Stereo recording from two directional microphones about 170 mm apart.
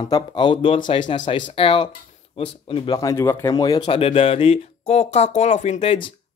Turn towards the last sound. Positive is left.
turn(degrees=40)  # may be behind; listen again after turning